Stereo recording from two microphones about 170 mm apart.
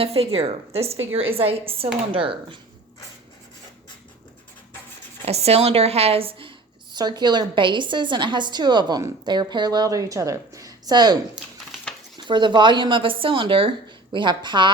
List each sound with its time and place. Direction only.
0.0 s a woman's voice: 35° right (ahead or behind)
5.2 s a woman's voice: 40° right (ahead or behind)
11.3 s a sound: centre (ahead or behind)
12.1 s a woman's voice: 25° right (ahead or behind)